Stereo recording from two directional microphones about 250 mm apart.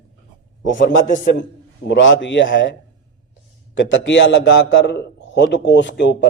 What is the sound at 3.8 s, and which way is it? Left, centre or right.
A man's voice, left.